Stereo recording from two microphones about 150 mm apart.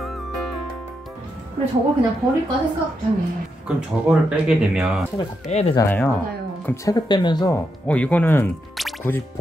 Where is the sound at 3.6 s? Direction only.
5° right (ahead or behind).